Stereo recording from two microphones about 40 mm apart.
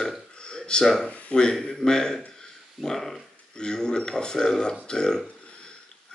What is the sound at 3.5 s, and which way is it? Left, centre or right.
Speech, centre.